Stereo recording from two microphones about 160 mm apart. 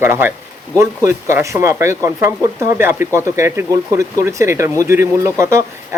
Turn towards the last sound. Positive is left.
turn(degrees=-15)  # may be behind; listen again after turning